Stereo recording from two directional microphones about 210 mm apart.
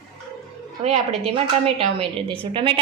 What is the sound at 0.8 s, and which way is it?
A woman's voice, 30° right (ahead or behind).